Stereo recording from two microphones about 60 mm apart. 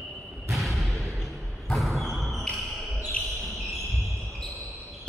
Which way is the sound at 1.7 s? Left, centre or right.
Centre.